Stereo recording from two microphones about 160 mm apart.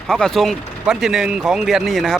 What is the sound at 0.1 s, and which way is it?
Speech, centre (ahead or behind).